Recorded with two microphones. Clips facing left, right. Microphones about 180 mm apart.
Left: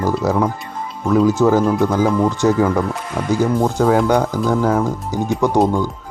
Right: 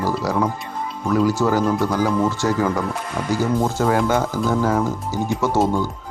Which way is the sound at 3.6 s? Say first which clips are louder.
Left 4 dB; centre (ahead or behind).